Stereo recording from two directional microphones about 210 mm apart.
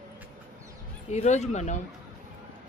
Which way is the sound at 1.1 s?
35° left (ahead or behind).